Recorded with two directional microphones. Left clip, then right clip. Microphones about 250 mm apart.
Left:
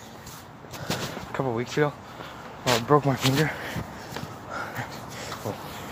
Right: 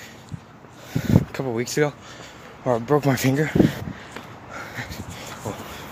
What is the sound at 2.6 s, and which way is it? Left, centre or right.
Speech, centre.